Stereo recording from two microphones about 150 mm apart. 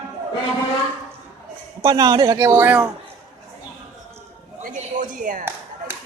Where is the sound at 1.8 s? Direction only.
25° right (ahead or behind); by 2.9 s 10° right (ahead or behind).